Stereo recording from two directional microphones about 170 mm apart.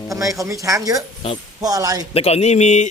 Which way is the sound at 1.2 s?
35° left (ahead or behind).